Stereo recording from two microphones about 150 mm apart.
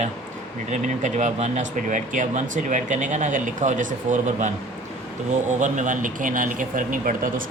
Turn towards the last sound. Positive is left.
turn(degrees=-65)  # may be behind; listen again after turning